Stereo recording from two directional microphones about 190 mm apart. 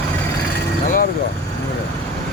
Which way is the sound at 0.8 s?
45° left (ahead or behind).